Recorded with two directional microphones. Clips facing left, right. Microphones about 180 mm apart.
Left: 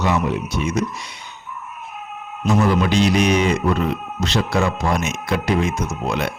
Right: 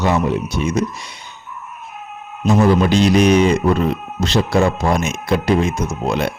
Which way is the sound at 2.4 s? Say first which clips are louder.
Right 4 dB; 30° right (ahead or behind).